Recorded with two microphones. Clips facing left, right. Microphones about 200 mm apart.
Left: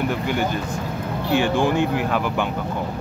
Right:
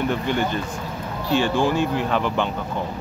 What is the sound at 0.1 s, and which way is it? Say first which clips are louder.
Speech: even; 10° left (ahead or behind).